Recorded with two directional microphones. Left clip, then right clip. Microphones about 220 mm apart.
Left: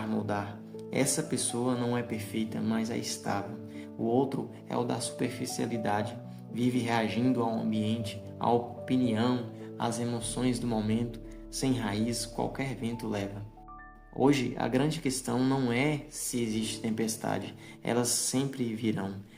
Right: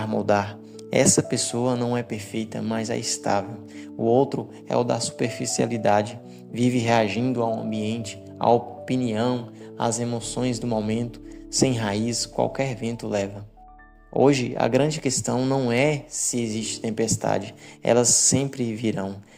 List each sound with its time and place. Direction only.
0.1 s speech: 35° right (ahead or behind)